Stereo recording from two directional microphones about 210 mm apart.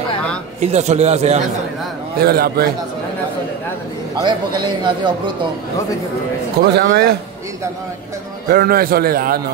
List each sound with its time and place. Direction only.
0.6 s a man's voice: 30° right (ahead or behind)
2.1 s a man's voice: 45° right (ahead or behind)
4.2 s a man's voice: 20° right (ahead or behind)
6.6 s a man's voice: 50° right (ahead or behind)
8.5 s a man's voice: 45° right (ahead or behind)